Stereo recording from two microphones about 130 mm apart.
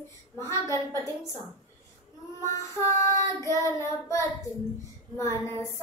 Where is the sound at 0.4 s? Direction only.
20° left (ahead or behind).